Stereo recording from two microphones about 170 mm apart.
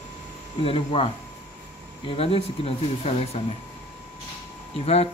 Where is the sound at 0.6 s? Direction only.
35° left (ahead or behind).